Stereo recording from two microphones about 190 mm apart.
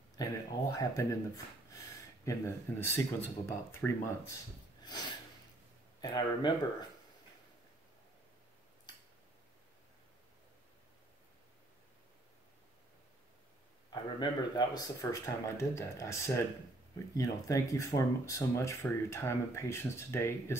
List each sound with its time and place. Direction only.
0.2 s speech: 20° left (ahead or behind)
4.8 s snort: 20° left (ahead or behind)
5.9 s speech: 25° left (ahead or behind)
13.8 s speech: 25° left (ahead or behind)